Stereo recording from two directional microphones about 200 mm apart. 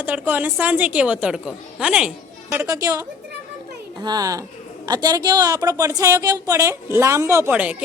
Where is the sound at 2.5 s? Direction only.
15° right (ahead or behind).